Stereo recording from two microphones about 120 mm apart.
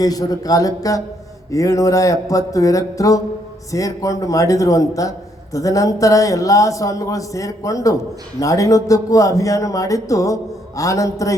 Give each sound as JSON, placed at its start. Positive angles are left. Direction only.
{"t": 0.0, "sound": "a man's voice", "side_deg": 30}